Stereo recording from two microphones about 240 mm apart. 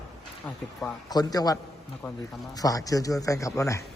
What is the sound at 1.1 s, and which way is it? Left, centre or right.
Speech, centre.